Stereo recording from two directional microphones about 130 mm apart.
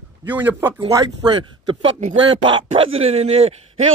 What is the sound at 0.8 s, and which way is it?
Speech, 30° right (ahead or behind).